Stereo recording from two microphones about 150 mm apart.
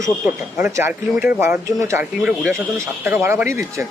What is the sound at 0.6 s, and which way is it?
Speech, 15° right (ahead or behind).